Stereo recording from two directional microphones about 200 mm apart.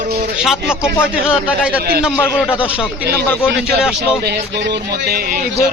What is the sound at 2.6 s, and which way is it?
Speech, 25° left (ahead or behind).